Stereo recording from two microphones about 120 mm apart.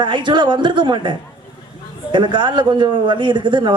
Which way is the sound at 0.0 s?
40° right (ahead or behind).